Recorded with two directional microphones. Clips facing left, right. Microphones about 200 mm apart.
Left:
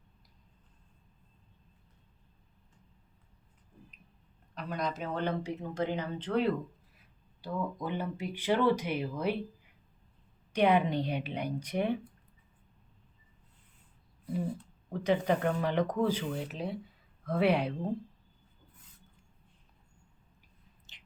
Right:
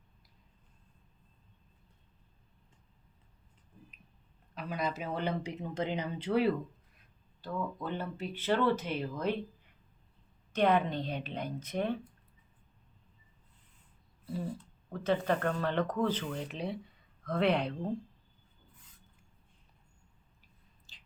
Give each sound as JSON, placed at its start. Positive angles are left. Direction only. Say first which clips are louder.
{"t": 4.5, "sound": "a woman's voice", "louder": "even", "side_deg": -5}
{"t": 6.9, "sound": "speech", "louder": "left 2 dB", "side_deg": 10}
{"t": 10.5, "sound": "speech", "louder": "left 2 dB", "side_deg": 10}
{"t": 14.8, "sound": "speech", "louder": "left 2 dB", "side_deg": 15}
{"t": 20.9, "sound": "a sound", "louder": "right 1 dB", "side_deg": 20}